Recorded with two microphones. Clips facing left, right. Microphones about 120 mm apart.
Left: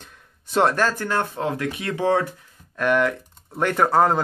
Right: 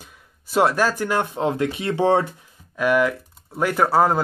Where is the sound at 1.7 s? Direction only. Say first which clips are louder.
Right 1 dB; 25° right (ahead or behind).